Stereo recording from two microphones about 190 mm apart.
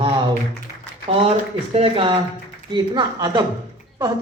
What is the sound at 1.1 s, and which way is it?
A man's voice, 30° right (ahead or behind).